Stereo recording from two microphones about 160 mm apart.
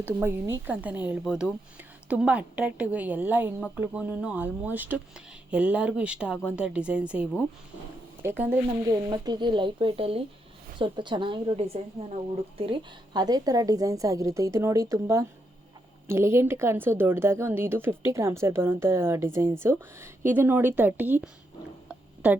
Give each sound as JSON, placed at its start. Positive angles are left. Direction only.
{"t": 0.0, "sound": "a woman's voice", "side_deg": -15}
{"t": 9.0, "sound": "a woman's voice", "side_deg": -25}
{"t": 21.8, "sound": "a sound", "side_deg": -10}